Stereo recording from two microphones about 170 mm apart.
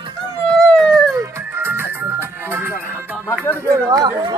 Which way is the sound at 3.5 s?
20° right (ahead or behind).